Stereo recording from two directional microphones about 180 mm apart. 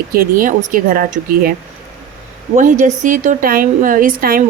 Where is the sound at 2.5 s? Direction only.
45° right (ahead or behind).